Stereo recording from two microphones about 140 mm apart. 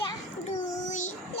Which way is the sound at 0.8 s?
60° left (ahead or behind).